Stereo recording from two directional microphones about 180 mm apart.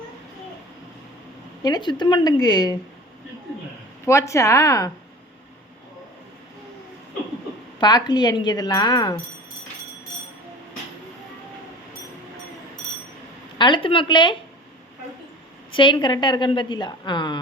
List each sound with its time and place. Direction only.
1.6 s a woman's voice: 25° left (ahead or behind)
4.0 s speech: 15° left (ahead or behind)
7.8 s a woman's voice: 20° left (ahead or behind)
13.6 s a woman's voice: 25° left (ahead or behind)
15.7 s a woman's voice: 25° left (ahead or behind)